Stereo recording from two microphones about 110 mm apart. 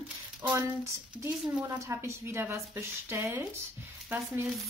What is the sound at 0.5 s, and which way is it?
A woman's voice, 25° right (ahead or behind).